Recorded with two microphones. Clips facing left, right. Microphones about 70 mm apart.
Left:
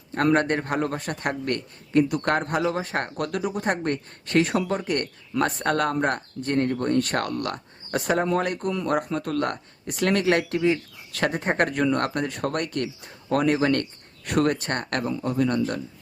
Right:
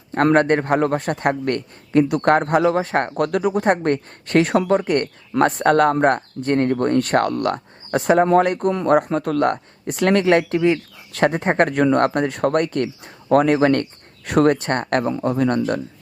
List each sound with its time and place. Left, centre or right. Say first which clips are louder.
0.1 s speech: right 6 dB; right